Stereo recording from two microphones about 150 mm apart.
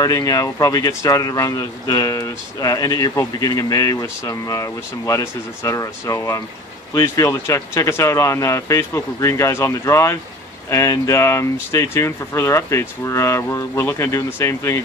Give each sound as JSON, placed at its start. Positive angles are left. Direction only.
{"t": 0.0, "sound": "speech", "side_deg": 25}